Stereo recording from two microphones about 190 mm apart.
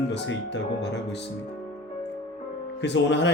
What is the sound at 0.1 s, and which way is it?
Speech, 65° left (ahead or behind).